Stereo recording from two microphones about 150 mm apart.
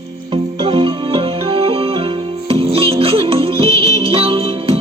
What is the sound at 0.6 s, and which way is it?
Music, 35° right (ahead or behind).